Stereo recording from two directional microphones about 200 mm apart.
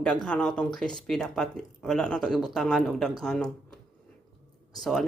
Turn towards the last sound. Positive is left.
turn(degrees=0)  # may be behind; listen again after turning